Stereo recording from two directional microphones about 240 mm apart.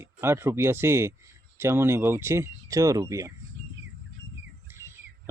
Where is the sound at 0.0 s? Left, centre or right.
Centre.